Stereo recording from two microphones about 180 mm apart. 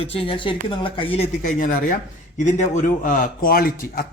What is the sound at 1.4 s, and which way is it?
Speech, 45° left (ahead or behind).